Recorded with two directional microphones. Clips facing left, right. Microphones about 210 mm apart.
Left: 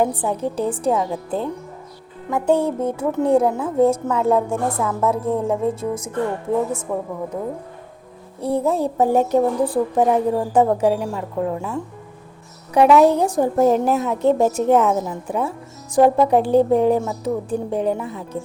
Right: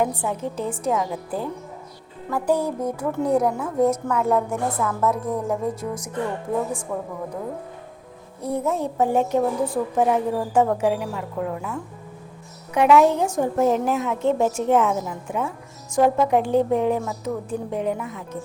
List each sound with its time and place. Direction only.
0.0 s a woman's voice: 35° left (ahead or behind)
8.4 s a woman's voice: 30° left (ahead or behind)